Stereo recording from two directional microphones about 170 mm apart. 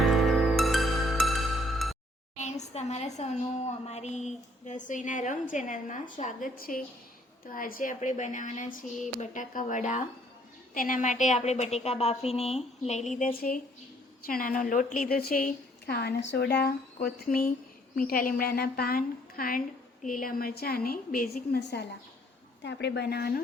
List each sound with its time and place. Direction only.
0.0 s music: centre (ahead or behind)
2.4 s a woman's voice: 40° left (ahead or behind); by 21.8 s 70° left (ahead or behind)
22.6 s speech: 90° left; by 23.4 s 65° left (ahead or behind)